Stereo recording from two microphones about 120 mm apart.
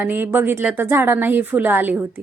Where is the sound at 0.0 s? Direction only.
15° right (ahead or behind).